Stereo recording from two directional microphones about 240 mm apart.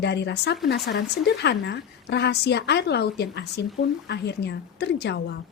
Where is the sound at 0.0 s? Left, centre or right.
Left.